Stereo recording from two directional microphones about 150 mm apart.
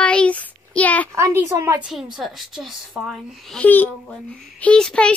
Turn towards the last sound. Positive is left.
turn(degrees=5)  # may be behind; listen again after turning